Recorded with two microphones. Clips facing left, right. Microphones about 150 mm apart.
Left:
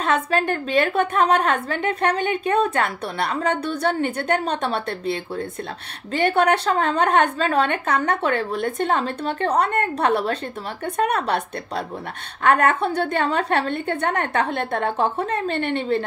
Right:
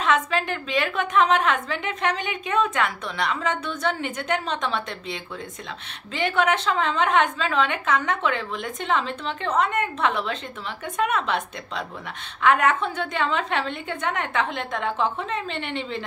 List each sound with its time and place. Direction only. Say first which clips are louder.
0.0 s a woman's voice: left 2 dB; 45° left (ahead or behind)